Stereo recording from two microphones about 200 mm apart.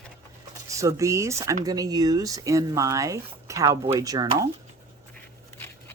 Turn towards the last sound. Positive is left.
turn(degrees=-15)  # may be behind; listen again after turning